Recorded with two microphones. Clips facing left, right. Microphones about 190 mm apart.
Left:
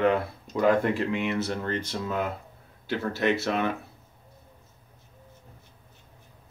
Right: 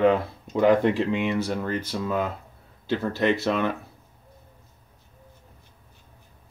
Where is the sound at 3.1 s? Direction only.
15° right (ahead or behind).